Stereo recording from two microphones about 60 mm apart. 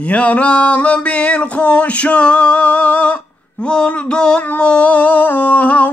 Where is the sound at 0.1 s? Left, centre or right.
Left.